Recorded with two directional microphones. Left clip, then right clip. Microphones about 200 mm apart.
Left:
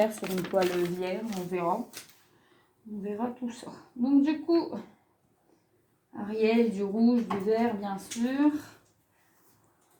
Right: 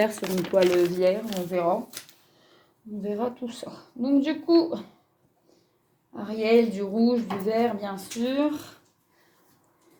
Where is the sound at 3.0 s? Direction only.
45° right (ahead or behind).